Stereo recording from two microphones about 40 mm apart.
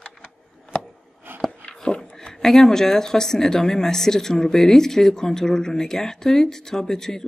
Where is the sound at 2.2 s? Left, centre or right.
Centre.